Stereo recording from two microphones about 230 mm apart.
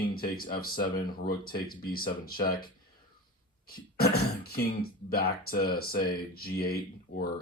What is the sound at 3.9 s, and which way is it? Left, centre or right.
Speech, left.